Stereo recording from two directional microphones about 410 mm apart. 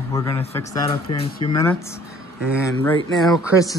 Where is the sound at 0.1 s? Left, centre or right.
Centre.